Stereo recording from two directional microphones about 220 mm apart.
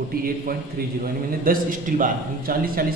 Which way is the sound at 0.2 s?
40° right (ahead or behind).